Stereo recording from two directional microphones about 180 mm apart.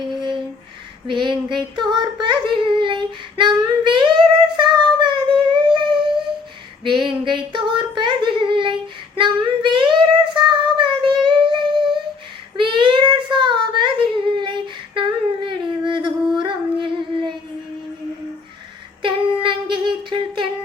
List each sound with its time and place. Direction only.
0.1 s a sound: 25° right (ahead or behind)
6.8 s child singing: 25° right (ahead or behind)
16.4 s music: 25° right (ahead or behind)
19.0 s humming: 25° right (ahead or behind)